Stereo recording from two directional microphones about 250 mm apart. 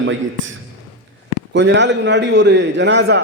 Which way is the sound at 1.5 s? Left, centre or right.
Right.